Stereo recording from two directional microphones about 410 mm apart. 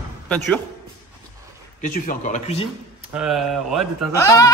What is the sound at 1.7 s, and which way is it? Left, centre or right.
Speech, centre.